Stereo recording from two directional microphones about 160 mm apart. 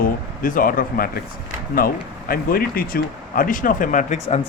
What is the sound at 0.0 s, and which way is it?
Speech, 60° left (ahead or behind).